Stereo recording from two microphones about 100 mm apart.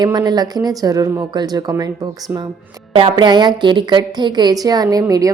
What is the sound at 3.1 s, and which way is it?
A woman's voice, 45° right (ahead or behind).